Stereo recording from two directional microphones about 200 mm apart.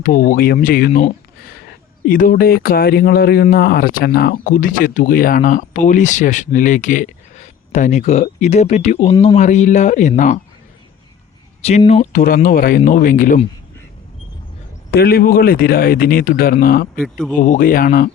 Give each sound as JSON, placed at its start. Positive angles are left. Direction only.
{"t": 0.0, "sound": "speech", "side_deg": 45}
{"t": 11.9, "sound": "speech", "side_deg": 35}
{"t": 12.2, "sound": "speech", "side_deg": 45}
{"t": 14.8, "sound": "speech", "side_deg": 50}
{"t": 16.9, "sound": "speech", "side_deg": 5}
{"t": 17.4, "sound": "speech", "side_deg": 40}